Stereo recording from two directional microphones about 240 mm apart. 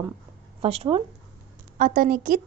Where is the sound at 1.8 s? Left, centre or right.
Right.